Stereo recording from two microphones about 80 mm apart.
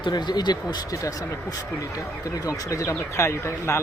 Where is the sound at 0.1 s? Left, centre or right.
Left.